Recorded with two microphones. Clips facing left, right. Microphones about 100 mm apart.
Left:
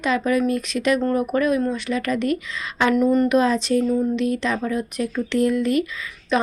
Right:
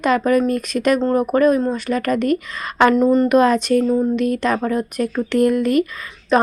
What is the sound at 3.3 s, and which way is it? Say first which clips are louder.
A woman's voice: right 4 dB; 55° right (ahead or behind).